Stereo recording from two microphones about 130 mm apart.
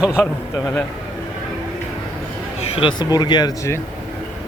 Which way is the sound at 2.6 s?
50° left (ahead or behind).